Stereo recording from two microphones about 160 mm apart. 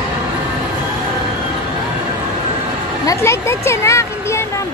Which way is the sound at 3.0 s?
15° left (ahead or behind).